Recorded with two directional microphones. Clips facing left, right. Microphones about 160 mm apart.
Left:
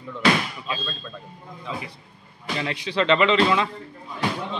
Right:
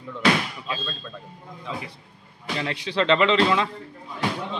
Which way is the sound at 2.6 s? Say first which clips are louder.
Even; 15° left (ahead or behind).